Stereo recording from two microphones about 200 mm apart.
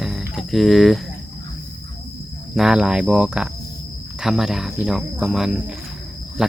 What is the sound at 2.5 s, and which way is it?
Speech, 5° right (ahead or behind).